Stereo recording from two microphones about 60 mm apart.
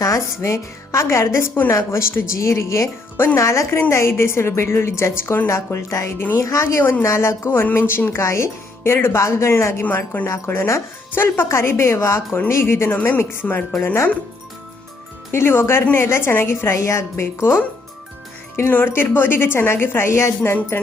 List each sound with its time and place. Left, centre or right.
0.0 s a woman's voice: left
13.8 s speech: left
15.3 s speech: left
16.7 s a woman's voice: left
18.9 s a woman's voice: left